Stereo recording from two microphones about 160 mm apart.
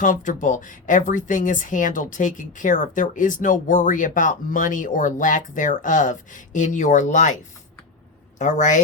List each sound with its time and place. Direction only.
0.0 s speech: 55° left (ahead or behind)
8.4 s speech: 50° left (ahead or behind)